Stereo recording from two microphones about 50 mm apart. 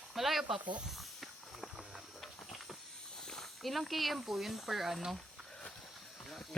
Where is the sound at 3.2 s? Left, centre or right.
Centre.